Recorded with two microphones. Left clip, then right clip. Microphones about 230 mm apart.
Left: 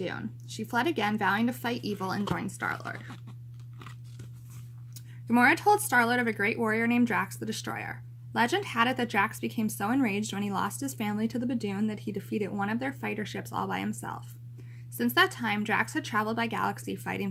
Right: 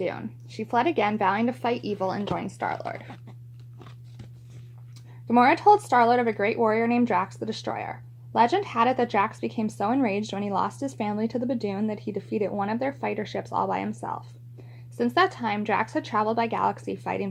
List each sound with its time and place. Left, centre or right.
0.0 s speech: centre
5.3 s speech: centre